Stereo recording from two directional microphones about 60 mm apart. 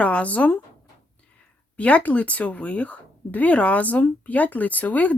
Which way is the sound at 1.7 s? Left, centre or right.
Left.